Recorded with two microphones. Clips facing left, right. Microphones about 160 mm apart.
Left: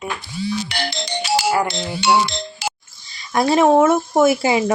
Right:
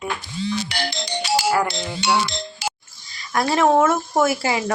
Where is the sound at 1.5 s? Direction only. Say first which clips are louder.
Left 1 dB; 25° left (ahead or behind).